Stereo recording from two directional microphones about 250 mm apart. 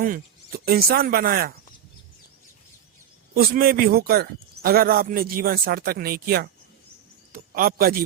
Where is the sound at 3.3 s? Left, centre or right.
Right.